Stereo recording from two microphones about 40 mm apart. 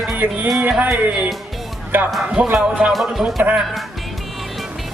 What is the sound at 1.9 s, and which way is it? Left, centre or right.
Speech, right.